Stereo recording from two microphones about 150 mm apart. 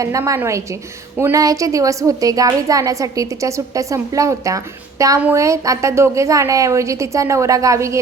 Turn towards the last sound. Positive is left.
turn(degrees=-20)  # may be behind; listen again after turning